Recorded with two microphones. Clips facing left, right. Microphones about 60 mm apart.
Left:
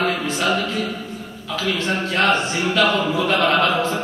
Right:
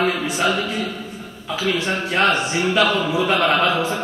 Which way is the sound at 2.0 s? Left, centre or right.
Centre.